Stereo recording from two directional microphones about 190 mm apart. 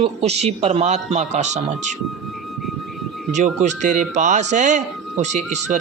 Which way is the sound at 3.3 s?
40° right (ahead or behind).